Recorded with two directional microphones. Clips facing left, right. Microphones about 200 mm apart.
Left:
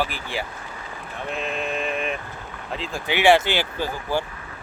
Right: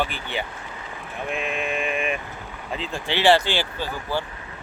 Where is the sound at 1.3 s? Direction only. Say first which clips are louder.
Even; 10° right (ahead or behind).